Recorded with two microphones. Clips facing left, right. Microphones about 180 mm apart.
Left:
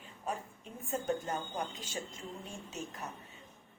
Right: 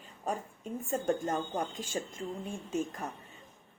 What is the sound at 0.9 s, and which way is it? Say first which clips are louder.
A woman's voice: right 4 dB; 45° right (ahead or behind).